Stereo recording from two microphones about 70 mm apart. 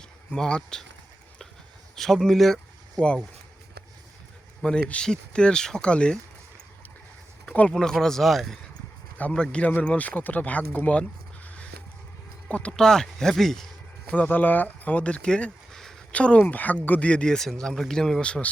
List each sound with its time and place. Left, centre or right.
0.3 s speech: centre
2.0 s speech: centre
4.6 s speech: centre
7.4 s a sound: left
7.7 s speech: centre
9.3 s speech: centre
11.4 s a sound: centre
12.5 s speech: centre
14.1 s speech: left